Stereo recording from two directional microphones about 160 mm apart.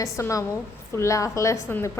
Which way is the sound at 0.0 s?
20° left (ahead or behind).